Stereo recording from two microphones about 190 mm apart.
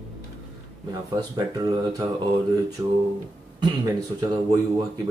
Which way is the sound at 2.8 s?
20° right (ahead or behind).